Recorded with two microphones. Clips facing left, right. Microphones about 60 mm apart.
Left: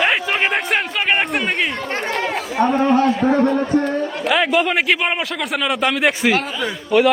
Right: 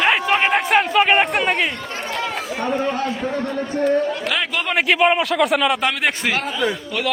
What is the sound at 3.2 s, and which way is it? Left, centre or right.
Speech, left.